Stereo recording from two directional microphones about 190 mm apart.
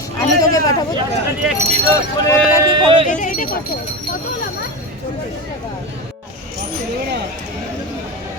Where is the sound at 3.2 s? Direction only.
45° left (ahead or behind).